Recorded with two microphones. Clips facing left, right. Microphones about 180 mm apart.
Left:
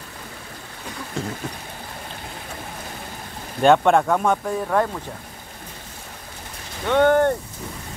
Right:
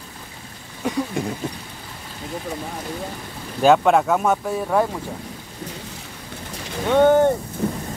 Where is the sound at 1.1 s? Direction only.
15° right (ahead or behind).